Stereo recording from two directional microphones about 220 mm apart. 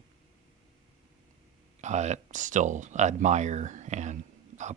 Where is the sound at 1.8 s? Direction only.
30° right (ahead or behind).